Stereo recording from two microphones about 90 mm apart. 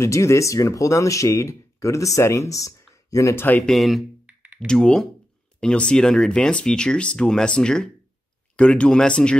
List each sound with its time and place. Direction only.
0.0 s speech: 35° left (ahead or behind)
3.6 s speech: centre (ahead or behind)
4.3 s computer keyboard: 10° right (ahead or behind)
4.6 s speech: 10° left (ahead or behind)